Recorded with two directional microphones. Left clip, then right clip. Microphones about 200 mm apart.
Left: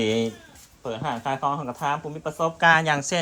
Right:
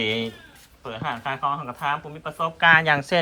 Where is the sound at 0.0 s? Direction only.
20° left (ahead or behind).